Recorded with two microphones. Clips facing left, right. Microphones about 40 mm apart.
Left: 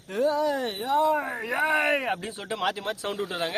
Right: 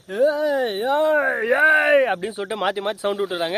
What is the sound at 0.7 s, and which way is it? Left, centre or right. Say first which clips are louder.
Speech: right 5 dB; right.